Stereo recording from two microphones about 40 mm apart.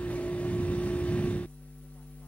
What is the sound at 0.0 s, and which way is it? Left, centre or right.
Vehicle, left.